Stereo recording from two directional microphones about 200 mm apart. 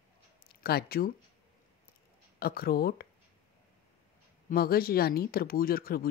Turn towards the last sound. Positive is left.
turn(degrees=50)  # may be behind; listen again after turning